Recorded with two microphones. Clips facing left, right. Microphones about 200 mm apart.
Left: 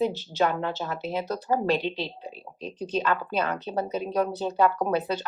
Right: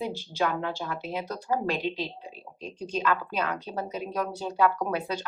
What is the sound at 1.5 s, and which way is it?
Speech, 40° left (ahead or behind).